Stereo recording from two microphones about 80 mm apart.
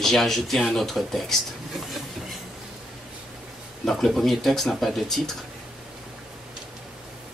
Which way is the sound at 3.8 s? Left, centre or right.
Centre.